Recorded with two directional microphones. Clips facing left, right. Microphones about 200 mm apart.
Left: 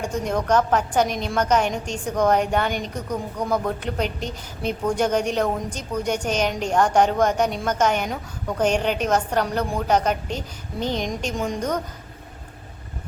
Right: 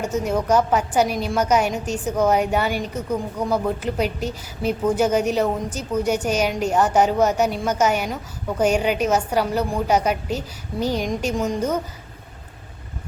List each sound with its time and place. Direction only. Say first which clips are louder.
0.0 s a woman's voice: right 2 dB; 5° right (ahead or behind)